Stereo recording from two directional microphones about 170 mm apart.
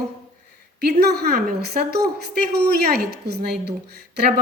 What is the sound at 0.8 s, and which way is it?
A woman's voice, 70° right (ahead or behind).